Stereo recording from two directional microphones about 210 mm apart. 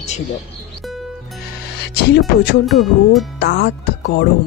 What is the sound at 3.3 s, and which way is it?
Speech, 50° left (ahead or behind).